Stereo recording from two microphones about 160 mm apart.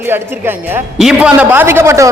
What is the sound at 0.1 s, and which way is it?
A man's voice, 15° right (ahead or behind).